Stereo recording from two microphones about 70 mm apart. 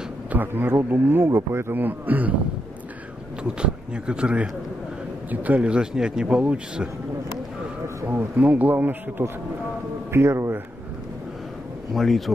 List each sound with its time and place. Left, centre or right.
0.3 s speech: right
3.4 s speech: centre
7.8 s a sound: right
8.4 s speech: right
11.9 s speech: centre